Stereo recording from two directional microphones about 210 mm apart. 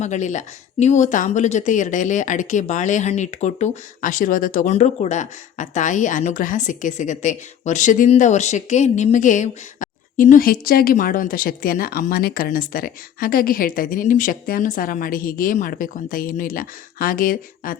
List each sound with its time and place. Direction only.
0.0 s speech: 35° left (ahead or behind)